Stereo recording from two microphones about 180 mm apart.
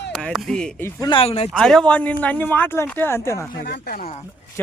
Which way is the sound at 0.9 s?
25° left (ahead or behind).